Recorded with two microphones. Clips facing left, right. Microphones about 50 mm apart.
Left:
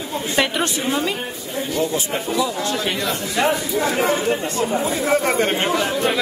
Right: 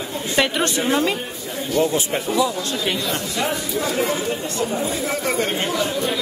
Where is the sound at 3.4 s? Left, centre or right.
Left.